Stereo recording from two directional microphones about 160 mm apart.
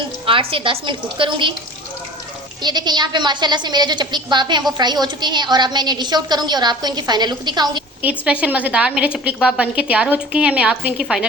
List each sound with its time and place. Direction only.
0.3 s a woman's voice: 35° right (ahead or behind)
2.6 s a woman's voice: 25° right (ahead or behind)
8.0 s a woman's voice: 10° right (ahead or behind)